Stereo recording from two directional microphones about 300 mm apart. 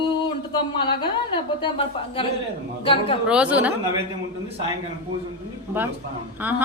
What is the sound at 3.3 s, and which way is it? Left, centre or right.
Speech, centre.